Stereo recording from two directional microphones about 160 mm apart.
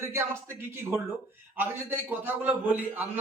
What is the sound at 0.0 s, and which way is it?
A man's voice, 15° right (ahead or behind).